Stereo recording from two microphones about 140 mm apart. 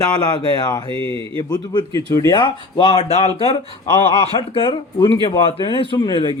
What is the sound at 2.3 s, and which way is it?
Speech, 35° left (ahead or behind).